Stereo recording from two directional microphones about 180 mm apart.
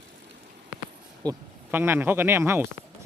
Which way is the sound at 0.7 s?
5° right (ahead or behind).